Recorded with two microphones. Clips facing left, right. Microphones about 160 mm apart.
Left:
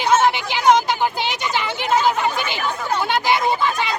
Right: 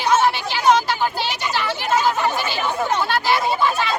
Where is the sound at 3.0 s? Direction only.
20° left (ahead or behind).